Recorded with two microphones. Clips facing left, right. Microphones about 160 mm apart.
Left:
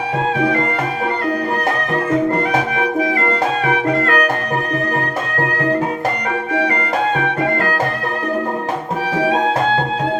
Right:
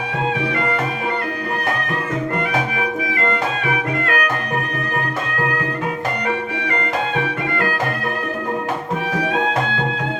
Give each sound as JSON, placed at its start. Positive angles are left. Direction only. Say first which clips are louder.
{"t": 3.7, "sound": "music", "louder": "left 5 dB", "side_deg": 35}